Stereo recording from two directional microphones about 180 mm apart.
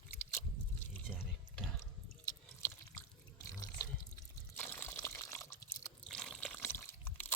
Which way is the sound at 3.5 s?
20° left (ahead or behind).